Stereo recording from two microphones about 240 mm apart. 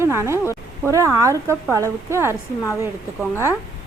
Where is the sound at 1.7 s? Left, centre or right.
Centre.